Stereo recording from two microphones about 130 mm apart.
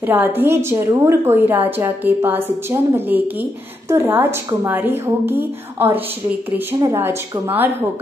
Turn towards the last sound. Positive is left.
turn(degrees=-15)  # may be behind; listen again after turning